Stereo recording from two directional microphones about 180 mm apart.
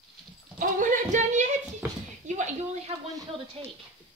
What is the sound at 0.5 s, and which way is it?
Speech, 45° right (ahead or behind).